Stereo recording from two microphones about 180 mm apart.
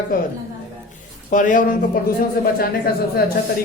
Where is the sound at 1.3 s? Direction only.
45° left (ahead or behind).